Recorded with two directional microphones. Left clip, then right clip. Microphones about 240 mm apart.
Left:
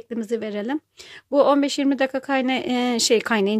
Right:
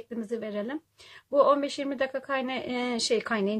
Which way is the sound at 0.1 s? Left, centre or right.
Left.